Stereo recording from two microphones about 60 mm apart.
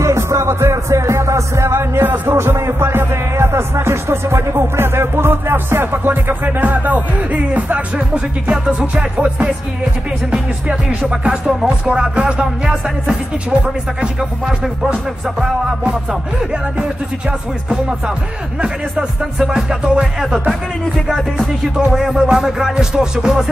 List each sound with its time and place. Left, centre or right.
0.0 s music: right; by 12.7 s centre
15.8 s music: centre
17.6 s music: centre